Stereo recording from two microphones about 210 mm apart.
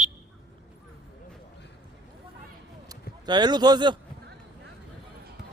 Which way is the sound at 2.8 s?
20° right (ahead or behind).